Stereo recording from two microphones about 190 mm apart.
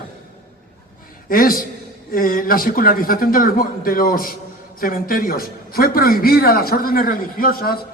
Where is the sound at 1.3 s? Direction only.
50° left (ahead or behind).